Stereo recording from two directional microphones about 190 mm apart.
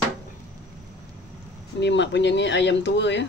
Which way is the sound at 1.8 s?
65° left (ahead or behind).